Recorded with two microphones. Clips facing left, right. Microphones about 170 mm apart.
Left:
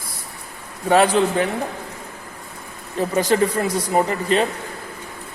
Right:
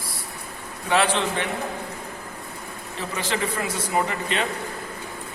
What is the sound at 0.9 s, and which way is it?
Speech, 40° left (ahead or behind).